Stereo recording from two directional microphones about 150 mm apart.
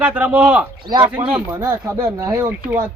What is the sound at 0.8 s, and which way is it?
Speech, 30° right (ahead or behind).